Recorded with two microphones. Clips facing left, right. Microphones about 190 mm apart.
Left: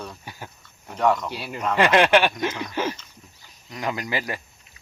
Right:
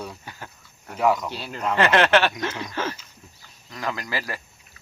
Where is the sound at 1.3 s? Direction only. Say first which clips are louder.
Even; 10° left (ahead or behind).